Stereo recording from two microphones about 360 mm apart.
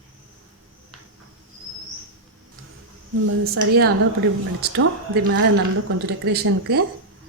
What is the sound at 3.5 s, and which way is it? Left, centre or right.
A woman's voice, right.